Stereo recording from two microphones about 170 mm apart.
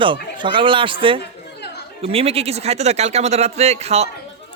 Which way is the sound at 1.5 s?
75° left (ahead or behind).